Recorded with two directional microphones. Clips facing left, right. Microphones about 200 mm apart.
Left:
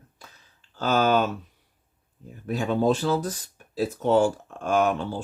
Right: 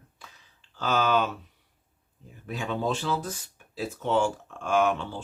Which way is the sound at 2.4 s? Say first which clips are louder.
Left 7 dB; 40° left (ahead or behind).